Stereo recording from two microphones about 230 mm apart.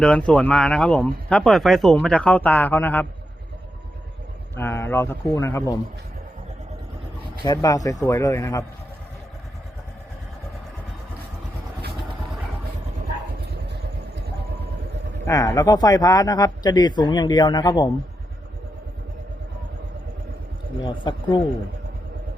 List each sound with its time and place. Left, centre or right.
0.0 s speech: centre
4.5 s speech: centre
7.4 s speech: centre
15.2 s speech: centre
20.8 s a man's voice: left